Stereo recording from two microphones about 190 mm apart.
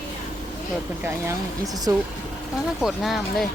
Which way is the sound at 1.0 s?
15° right (ahead or behind).